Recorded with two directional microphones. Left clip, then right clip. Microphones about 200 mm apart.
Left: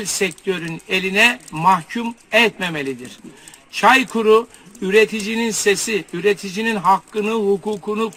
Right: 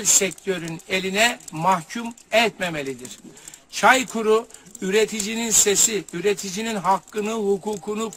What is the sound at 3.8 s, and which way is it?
Speech, 20° right (ahead or behind).